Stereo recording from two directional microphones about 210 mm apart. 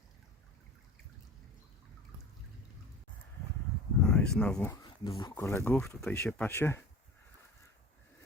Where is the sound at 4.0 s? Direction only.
5° left (ahead or behind).